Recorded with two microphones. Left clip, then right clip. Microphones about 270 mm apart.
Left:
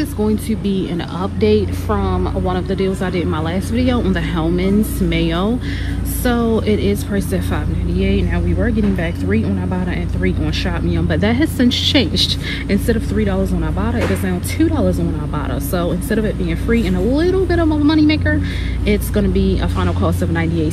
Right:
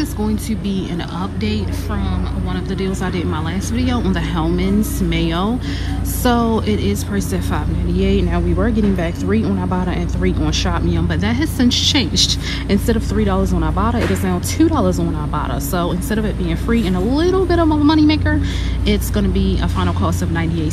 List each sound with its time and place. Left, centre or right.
0.0 s speech: centre
2.0 s speech: centre